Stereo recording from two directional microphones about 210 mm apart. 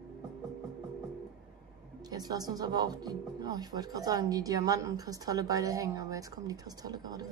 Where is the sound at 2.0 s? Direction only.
20° right (ahead or behind).